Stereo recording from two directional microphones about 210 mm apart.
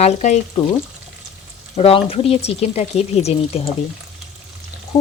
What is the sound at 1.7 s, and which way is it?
Speech, 30° left (ahead or behind).